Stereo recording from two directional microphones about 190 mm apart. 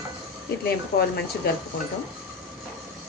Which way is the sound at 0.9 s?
55° left (ahead or behind).